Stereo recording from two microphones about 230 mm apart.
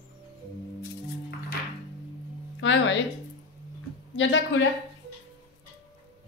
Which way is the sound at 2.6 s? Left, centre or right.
Left.